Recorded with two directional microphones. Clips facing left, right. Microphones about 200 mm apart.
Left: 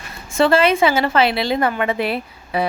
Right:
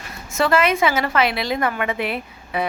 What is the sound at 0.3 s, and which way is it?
A woman's voice, 30° left (ahead or behind).